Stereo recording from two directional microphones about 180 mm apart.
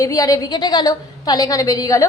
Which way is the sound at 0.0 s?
20° left (ahead or behind).